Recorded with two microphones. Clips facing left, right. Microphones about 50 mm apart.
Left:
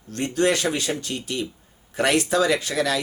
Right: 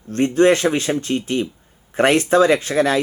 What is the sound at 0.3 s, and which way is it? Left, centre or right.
Speech, right.